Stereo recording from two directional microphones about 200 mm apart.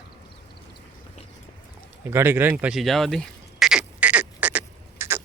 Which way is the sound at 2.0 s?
10° right (ahead or behind).